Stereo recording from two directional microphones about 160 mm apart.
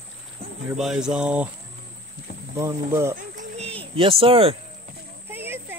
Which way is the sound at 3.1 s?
55° right (ahead or behind).